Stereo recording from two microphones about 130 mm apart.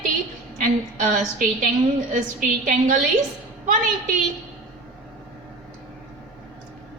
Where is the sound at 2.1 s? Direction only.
85° right.